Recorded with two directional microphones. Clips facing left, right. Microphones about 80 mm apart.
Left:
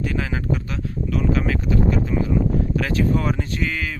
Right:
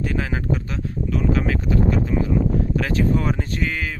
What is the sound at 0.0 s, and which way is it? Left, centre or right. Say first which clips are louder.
Speech: even; right.